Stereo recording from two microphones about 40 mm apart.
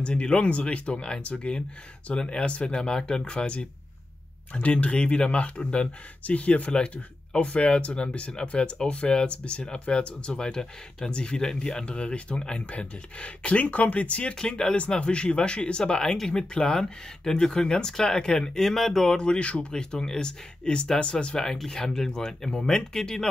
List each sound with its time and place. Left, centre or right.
0.0 s speech: left
4.6 s speech: left
14.3 s speech: left
19.1 s speech: left